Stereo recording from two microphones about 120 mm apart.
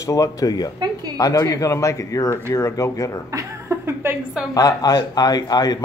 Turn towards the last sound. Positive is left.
turn(degrees=35)  # may be behind; listen again after turning